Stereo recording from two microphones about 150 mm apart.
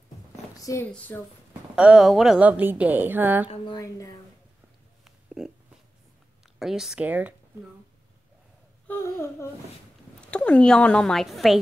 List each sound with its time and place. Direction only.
0.6 s speech: 20° left (ahead or behind)
0.9 s a sound: 10° left (ahead or behind)
1.8 s a woman's voice: 5° right (ahead or behind)
3.4 s a woman's voice: 35° left (ahead or behind)
5.0 s burping: 5° right (ahead or behind)
6.6 s a woman's voice: centre (ahead or behind)
8.8 s a sound: 15° left (ahead or behind)
10.3 s a woman's voice: 10° left (ahead or behind)